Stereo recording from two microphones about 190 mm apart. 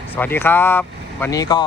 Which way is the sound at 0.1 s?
10° left (ahead or behind).